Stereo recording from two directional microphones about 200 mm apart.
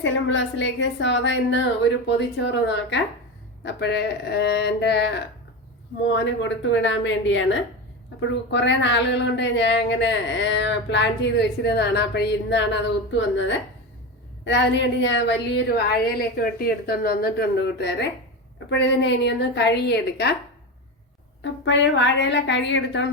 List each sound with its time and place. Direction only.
0.0 s a woman's voice: 70° left (ahead or behind)
14.4 s a woman's voice: 60° left (ahead or behind)
21.4 s speech: 65° left (ahead or behind)